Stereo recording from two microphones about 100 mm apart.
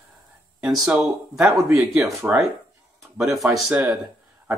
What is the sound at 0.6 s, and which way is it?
Speech, 10° right (ahead or behind).